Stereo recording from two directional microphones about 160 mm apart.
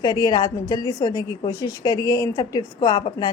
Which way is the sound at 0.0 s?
25° left (ahead or behind).